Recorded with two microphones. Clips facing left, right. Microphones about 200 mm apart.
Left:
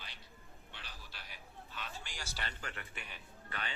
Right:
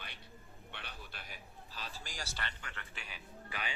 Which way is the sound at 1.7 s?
35° right (ahead or behind).